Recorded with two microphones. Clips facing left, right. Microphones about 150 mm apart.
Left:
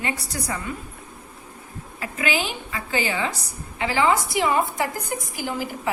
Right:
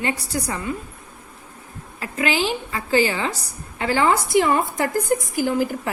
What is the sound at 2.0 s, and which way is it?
A woman's voice, 30° right (ahead or behind).